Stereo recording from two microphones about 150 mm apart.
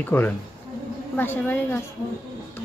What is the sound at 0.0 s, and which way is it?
Speech, 15° left (ahead or behind).